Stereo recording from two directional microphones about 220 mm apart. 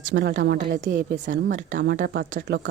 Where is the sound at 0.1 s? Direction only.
50° right (ahead or behind).